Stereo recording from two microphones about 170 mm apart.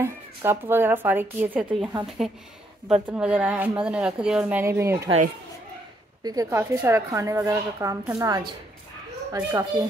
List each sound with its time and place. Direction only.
0.0 s a woman's voice: 15° right (ahead or behind)
6.2 s a woman's voice: 20° right (ahead or behind)